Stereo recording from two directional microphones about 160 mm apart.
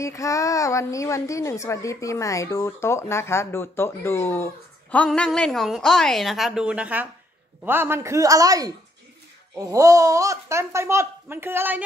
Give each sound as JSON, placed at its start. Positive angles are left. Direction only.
{"t": 0.0, "sound": "a woman's voice", "side_deg": 20}